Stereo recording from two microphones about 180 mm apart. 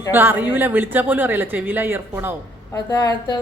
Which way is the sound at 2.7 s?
20° left (ahead or behind).